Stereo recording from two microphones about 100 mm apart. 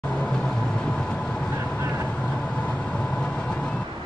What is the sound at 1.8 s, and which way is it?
Vehicle, 25° right (ahead or behind).